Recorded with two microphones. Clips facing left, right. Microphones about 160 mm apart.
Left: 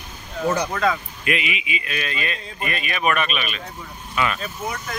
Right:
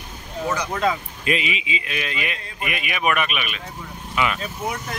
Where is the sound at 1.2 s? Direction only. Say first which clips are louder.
Right 2 dB; 30° right (ahead or behind); by 4.7 s 15° right (ahead or behind).